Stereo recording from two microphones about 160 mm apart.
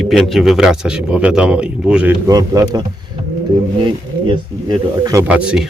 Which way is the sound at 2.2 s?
20° right (ahead or behind).